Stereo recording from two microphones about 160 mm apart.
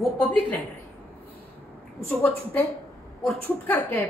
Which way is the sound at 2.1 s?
10° left (ahead or behind).